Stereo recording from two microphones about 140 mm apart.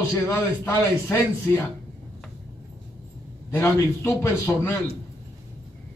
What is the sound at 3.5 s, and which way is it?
A man's voice, 20° left (ahead or behind).